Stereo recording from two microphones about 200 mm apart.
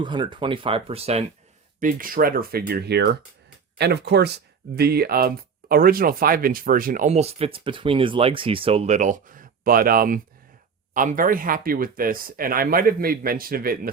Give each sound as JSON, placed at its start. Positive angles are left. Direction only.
{"t": 0.0, "sound": "speech", "side_deg": -25}
{"t": 1.8, "sound": "speech", "side_deg": -45}